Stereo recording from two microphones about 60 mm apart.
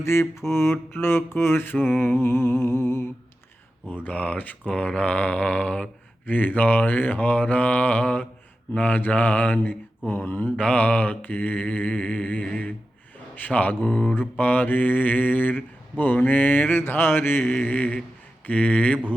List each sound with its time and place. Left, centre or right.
0.0 s music: left
4.0 s mantra: left
6.2 s mantra: left
12.5 s a sound: centre
13.5 s mantra: left